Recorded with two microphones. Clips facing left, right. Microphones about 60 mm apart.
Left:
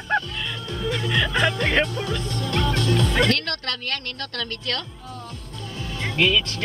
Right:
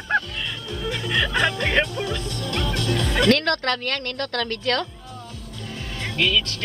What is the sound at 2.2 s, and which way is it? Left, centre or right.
Music, left.